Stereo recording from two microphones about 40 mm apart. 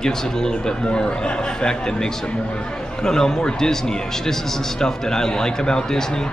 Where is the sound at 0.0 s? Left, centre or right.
Centre.